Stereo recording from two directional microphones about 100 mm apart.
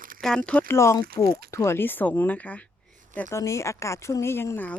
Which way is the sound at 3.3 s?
30° left (ahead or behind).